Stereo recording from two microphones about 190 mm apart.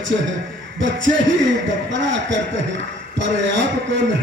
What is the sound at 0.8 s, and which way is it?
Speech, 75° right (ahead or behind).